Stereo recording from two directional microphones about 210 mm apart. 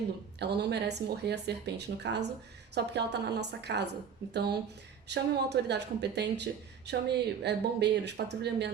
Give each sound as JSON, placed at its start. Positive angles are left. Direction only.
{"t": 0.3, "sound": "speech", "side_deg": -50}